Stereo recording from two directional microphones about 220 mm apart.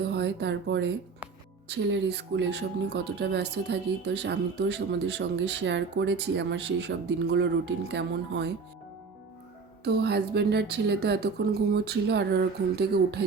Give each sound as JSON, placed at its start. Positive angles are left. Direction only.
{"t": 0.0, "sound": "speech", "side_deg": -50}
{"t": 9.8, "sound": "speech", "side_deg": -45}